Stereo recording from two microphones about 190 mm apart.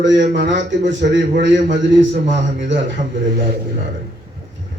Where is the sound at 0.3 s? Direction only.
70° right (ahead or behind).